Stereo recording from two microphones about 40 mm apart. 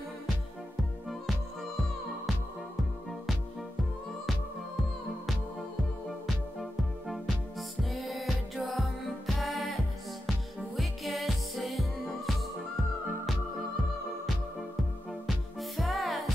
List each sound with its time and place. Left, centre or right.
6.0 s music: centre
10.8 s music: centre
15.2 s music: centre